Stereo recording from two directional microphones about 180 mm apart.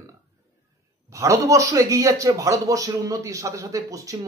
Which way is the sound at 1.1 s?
15° right (ahead or behind).